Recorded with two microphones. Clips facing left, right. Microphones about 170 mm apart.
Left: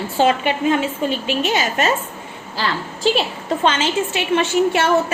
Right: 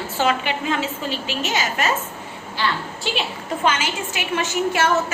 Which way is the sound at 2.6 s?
40° left (ahead or behind).